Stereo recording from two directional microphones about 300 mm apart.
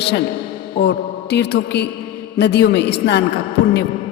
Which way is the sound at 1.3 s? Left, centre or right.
Left.